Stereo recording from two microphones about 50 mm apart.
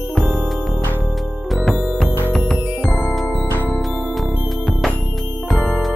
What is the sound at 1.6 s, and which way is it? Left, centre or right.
Music, centre.